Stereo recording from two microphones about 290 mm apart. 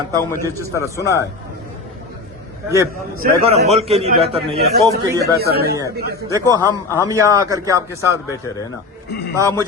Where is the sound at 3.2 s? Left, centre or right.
Right.